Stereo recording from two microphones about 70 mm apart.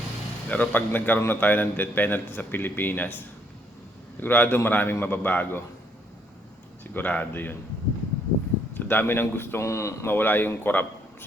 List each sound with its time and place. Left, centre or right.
0.4 s speech: left
6.9 s speech: left
8.7 s speech: left
10.2 s speech: left